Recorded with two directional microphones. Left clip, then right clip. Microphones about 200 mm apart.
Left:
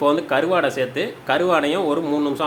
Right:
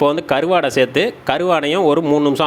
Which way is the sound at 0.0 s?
40° right (ahead or behind).